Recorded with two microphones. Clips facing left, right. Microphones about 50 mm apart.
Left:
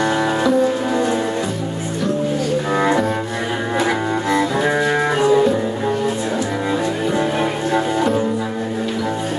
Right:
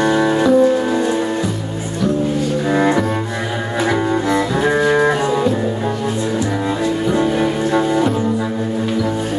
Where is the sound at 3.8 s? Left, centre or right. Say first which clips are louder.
Right 4 dB; centre.